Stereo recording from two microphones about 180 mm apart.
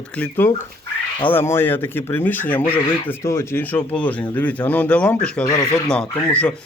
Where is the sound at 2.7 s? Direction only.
25° left (ahead or behind).